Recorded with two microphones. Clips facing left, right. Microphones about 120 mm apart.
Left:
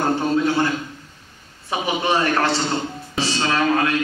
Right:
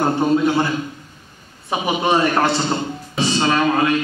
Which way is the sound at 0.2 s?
15° right (ahead or behind).